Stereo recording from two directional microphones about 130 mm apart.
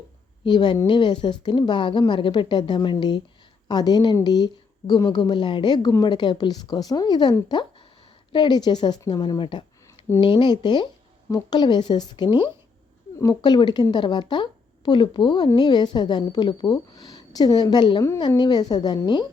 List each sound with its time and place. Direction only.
0.4 s speech: 35° left (ahead or behind)